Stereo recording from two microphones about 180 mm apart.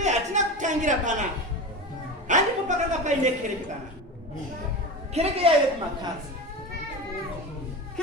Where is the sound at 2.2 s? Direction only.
40° right (ahead or behind).